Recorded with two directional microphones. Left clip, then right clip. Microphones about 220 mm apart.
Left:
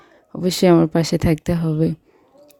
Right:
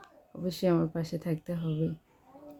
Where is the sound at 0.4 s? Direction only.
45° left (ahead or behind).